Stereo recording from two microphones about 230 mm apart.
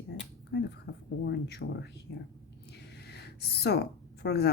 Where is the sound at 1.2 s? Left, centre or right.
Left.